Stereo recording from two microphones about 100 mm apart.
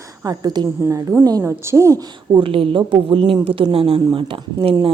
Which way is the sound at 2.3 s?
60° right (ahead or behind).